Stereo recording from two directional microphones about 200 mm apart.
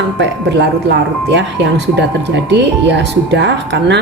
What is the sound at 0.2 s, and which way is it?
Speech, 60° right (ahead or behind).